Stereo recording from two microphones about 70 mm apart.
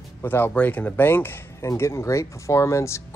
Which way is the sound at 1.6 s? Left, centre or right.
Left.